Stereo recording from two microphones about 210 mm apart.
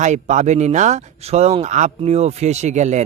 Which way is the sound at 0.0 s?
35° right (ahead or behind).